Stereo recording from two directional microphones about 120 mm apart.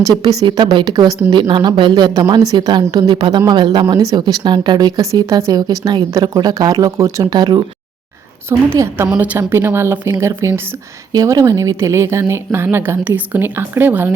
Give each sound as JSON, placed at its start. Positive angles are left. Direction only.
{"t": 0.4, "sound": "a woman's voice", "side_deg": -40}
{"t": 8.4, "sound": "a woman's voice", "side_deg": -20}